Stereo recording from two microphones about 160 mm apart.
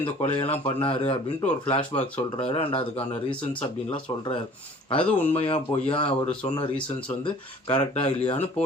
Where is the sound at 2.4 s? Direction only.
35° left (ahead or behind).